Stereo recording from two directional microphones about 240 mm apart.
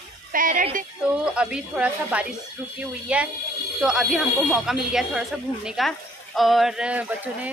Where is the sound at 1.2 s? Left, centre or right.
Centre.